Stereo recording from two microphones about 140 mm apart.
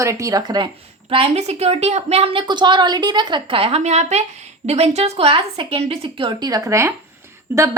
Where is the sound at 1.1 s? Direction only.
45° right (ahead or behind).